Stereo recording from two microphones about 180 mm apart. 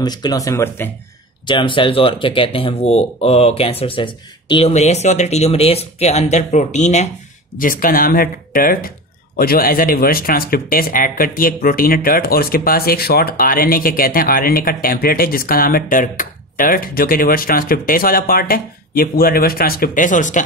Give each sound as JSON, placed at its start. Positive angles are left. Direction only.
{"t": 0.0, "sound": "speech", "side_deg": 20}
{"t": 1.4, "sound": "speech", "side_deg": 25}
{"t": 7.5, "sound": "speech", "side_deg": 50}